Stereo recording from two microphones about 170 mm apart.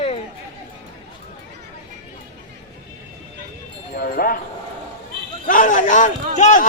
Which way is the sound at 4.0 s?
60° left (ahead or behind).